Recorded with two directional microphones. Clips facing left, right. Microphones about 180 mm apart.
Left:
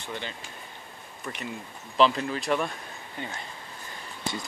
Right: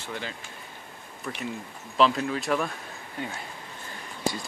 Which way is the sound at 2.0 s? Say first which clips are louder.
Even; centre (ahead or behind).